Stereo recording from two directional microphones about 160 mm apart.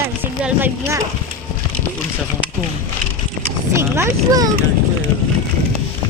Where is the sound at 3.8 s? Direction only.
15° right (ahead or behind).